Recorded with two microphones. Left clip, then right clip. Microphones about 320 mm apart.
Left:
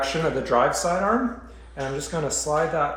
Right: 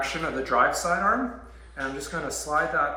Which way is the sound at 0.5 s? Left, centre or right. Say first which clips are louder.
Left 1 dB; left.